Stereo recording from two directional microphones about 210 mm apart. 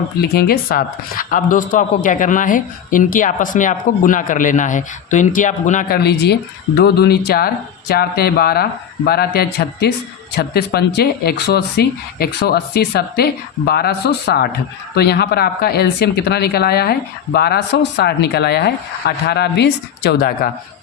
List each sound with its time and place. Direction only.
0.2 s speech: 45° left (ahead or behind)
6.0 s speech: 50° left (ahead or behind)